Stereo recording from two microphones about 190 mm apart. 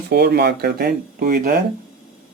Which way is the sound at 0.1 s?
60° right (ahead or behind).